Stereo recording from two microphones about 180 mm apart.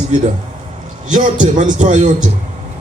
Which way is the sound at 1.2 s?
45° right (ahead or behind).